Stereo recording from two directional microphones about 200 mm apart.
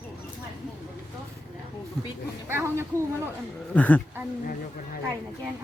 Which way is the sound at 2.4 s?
10° right (ahead or behind).